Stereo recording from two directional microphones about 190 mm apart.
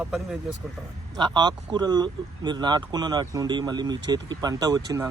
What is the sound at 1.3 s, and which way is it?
Speech, 20° right (ahead or behind).